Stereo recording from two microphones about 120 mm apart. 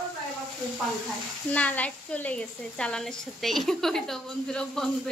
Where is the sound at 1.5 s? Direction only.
10° left (ahead or behind).